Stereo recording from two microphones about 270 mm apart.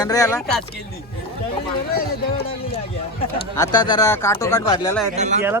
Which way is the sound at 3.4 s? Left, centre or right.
Centre.